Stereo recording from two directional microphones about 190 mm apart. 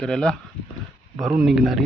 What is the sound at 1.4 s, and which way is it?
Speech, centre (ahead or behind).